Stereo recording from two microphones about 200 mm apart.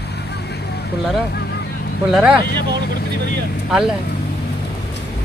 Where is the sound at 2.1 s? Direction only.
Centre (ahead or behind).